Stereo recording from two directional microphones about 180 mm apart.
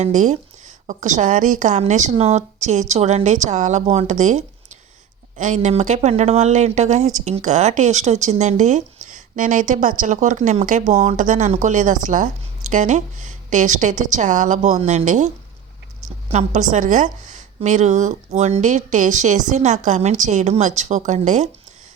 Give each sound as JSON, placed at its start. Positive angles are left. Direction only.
{"t": 0.0, "sound": "a woman's voice", "side_deg": -40}
{"t": 16.3, "sound": "speech", "side_deg": -40}